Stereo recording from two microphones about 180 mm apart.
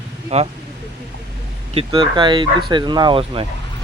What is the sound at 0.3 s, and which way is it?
Speech, 35° right (ahead or behind).